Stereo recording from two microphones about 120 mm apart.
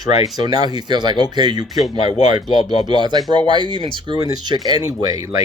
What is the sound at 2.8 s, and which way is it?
Speech, 35° right (ahead or behind).